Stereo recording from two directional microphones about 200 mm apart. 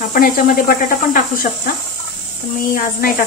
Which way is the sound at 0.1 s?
45° left (ahead or behind).